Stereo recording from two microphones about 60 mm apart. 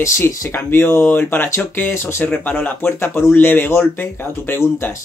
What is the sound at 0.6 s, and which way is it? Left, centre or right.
Speech, left.